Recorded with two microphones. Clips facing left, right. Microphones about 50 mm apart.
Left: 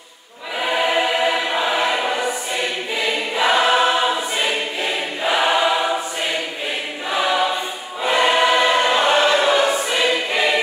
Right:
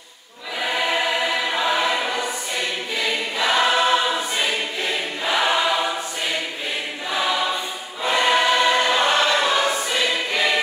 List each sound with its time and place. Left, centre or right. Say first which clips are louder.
0.7 s choir: left 3 dB; centre
3.3 s choir: left 3 dB; centre
7.1 s choir: left 4 dB; centre